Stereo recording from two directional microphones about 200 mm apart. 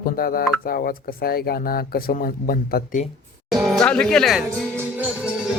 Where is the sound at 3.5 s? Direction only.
Centre (ahead or behind).